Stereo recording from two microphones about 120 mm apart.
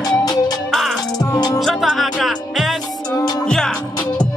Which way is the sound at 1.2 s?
30° left (ahead or behind).